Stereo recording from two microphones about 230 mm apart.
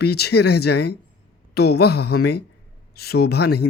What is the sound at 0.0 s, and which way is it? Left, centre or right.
Speech, left.